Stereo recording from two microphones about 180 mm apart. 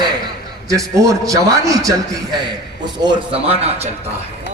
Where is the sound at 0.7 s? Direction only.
20° right (ahead or behind); by 4.1 s 35° right (ahead or behind).